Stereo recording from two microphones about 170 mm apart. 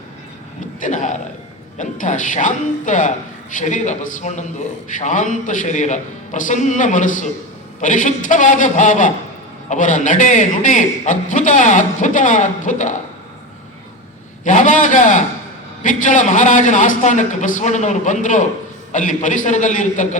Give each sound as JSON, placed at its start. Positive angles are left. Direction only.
{"t": 0.8, "sound": "a man's voice", "side_deg": 45}
{"t": 14.4, "sound": "a man's voice", "side_deg": 45}